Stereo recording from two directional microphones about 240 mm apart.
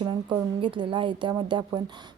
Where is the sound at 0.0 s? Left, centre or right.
Centre.